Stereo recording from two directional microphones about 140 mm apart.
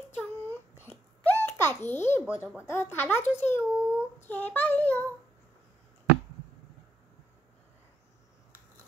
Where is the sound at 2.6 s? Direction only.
20° left (ahead or behind).